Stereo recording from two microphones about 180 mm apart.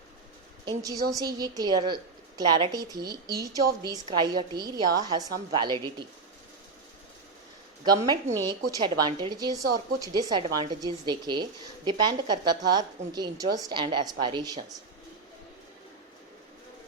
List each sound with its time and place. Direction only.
0.6 s a woman's voice: 20° right (ahead or behind)
7.9 s a woman's voice: 20° right (ahead or behind)